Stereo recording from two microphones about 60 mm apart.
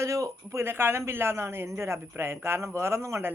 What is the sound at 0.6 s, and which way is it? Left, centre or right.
Speech, right.